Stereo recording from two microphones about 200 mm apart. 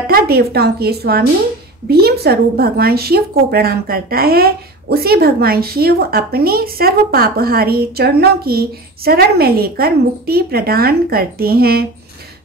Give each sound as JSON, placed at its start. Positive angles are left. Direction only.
{"t": 0.0, "sound": "a woman's voice", "side_deg": -50}